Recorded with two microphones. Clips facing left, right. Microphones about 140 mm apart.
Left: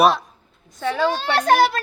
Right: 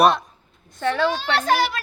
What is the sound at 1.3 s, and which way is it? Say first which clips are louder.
Speech: left 7 dB; 45° left (ahead or behind).